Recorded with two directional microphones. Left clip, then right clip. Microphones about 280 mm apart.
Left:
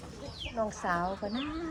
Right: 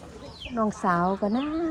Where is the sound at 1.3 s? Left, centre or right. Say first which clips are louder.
Right 8 dB; centre.